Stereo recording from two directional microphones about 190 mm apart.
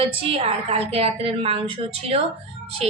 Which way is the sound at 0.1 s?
30° right (ahead or behind).